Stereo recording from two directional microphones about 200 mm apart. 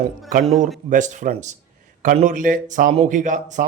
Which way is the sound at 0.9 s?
40° right (ahead or behind).